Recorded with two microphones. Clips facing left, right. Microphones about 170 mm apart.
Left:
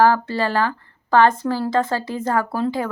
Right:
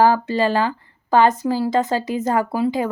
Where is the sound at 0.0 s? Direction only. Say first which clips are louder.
Right 1 dB; 20° right (ahead or behind).